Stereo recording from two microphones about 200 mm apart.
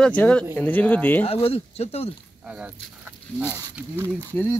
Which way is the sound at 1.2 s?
30° left (ahead or behind).